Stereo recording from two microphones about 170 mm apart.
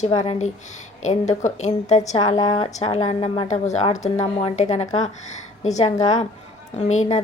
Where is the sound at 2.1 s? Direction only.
25° left (ahead or behind).